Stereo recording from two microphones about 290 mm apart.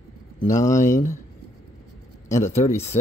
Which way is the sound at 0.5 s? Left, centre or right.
Centre.